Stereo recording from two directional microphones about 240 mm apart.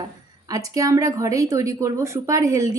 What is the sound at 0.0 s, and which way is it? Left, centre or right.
A woman's voice, centre.